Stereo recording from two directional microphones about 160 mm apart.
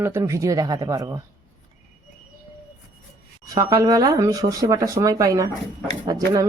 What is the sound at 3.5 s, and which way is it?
Speech, 20° right (ahead or behind).